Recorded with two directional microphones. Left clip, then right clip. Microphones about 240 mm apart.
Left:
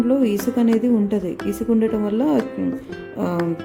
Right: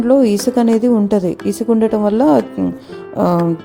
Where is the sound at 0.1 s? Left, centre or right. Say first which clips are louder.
Right 12 dB; right.